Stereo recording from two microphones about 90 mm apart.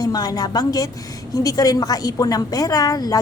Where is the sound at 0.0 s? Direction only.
45° left (ahead or behind).